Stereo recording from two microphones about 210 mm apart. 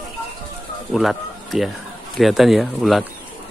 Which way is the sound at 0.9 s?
Centre (ahead or behind).